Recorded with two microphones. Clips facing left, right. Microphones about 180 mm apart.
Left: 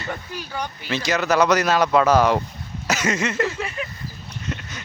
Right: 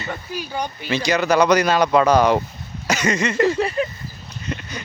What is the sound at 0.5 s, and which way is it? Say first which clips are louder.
Speech: right 2 dB; 15° right (ahead or behind).